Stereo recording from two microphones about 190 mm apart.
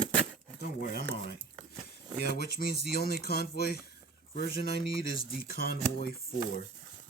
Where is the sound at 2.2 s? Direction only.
55° left (ahead or behind).